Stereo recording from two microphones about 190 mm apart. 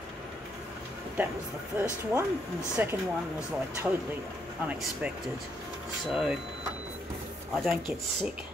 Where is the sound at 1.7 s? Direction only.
10° right (ahead or behind).